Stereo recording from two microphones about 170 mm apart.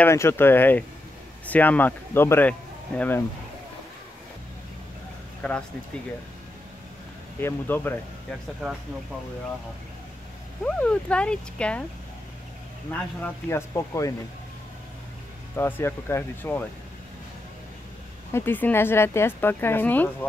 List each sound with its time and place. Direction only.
0.0 s speech: 15° left (ahead or behind)
5.4 s speech: 10° left (ahead or behind)
7.3 s speech: 15° left (ahead or behind)
10.6 s speech: 5° left (ahead or behind)
13.2 s speech: 15° left (ahead or behind)
15.5 s speech: 15° left (ahead or behind)
18.3 s speech: 10° left (ahead or behind)